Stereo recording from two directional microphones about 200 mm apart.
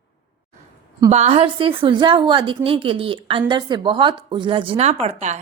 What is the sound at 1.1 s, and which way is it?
A woman's voice, 30° right (ahead or behind).